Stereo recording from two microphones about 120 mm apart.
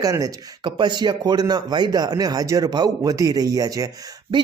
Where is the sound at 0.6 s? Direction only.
40° right (ahead or behind).